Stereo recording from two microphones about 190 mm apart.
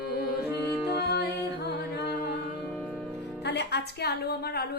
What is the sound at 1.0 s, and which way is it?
Music, 60° left (ahead or behind).